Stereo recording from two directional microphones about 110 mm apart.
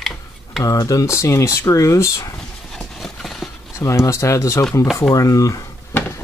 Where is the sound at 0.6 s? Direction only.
30° left (ahead or behind).